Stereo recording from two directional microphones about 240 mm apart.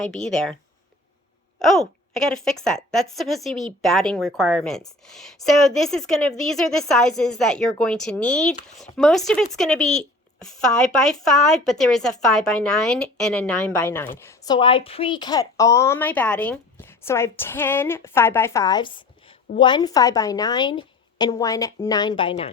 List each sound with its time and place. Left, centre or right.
0.1 s a woman's voice: centre
1.5 s a woman's voice: centre
14.3 s a woman's voice: centre